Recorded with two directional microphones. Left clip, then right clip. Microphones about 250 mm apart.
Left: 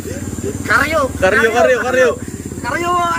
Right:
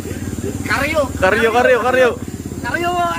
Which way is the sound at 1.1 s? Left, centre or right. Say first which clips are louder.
Even; centre.